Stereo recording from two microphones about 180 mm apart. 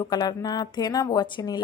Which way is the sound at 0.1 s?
20° left (ahead or behind).